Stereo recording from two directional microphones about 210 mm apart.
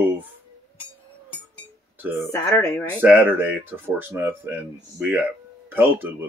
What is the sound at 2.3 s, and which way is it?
Speech, 15° left (ahead or behind).